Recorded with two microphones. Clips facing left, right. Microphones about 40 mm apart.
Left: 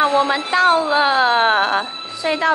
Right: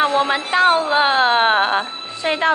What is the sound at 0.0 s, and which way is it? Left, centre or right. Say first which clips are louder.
A woman's voice: left 1 dB; centre.